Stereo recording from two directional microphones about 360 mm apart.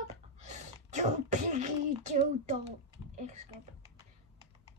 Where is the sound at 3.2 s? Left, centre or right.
Centre.